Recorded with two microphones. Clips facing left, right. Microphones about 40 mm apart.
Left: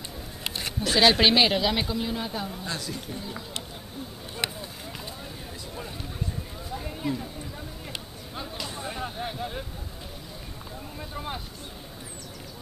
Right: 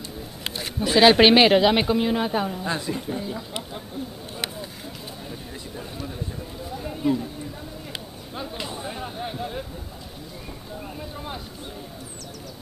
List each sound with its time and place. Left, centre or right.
0.7 s speech: centre
1.1 s a woman's voice: right
2.5 s speech: right
6.8 s a sound: centre
8.7 s a sound: centre
11.0 s speech: centre